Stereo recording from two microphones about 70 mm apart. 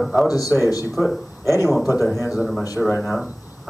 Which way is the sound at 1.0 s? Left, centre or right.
Centre.